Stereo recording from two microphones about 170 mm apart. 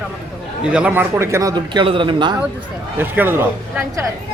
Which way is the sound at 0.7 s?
10° right (ahead or behind).